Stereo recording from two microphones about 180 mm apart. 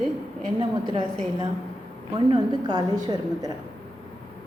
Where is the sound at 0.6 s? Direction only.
25° right (ahead or behind).